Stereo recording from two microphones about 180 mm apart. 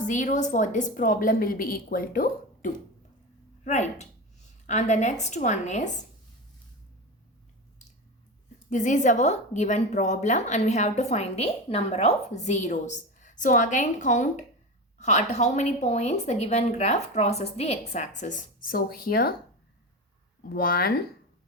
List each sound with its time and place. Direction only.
0.0 s a woman's voice: 45° left (ahead or behind)
8.7 s a woman's voice: 45° left (ahead or behind)
20.5 s speech: 55° left (ahead or behind)